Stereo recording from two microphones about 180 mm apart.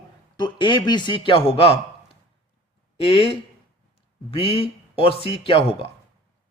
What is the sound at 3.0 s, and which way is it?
Speech, 30° left (ahead or behind).